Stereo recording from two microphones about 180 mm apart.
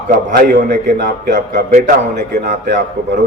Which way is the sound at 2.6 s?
75° right (ahead or behind).